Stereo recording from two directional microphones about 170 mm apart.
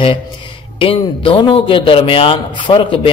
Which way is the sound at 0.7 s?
30° left (ahead or behind).